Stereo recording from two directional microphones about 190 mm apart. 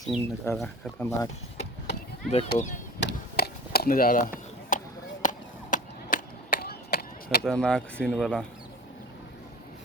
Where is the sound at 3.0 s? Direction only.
55° left (ahead or behind).